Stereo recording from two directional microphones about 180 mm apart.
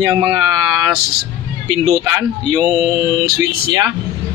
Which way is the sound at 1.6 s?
25° right (ahead or behind).